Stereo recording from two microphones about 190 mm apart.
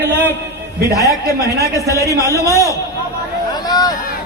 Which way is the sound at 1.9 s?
15° left (ahead or behind).